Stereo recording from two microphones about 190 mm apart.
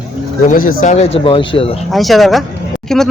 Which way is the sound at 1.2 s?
25° left (ahead or behind).